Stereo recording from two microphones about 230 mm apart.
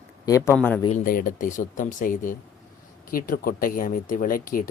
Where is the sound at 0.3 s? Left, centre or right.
Centre.